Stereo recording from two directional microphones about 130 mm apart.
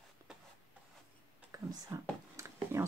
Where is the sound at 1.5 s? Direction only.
20° right (ahead or behind).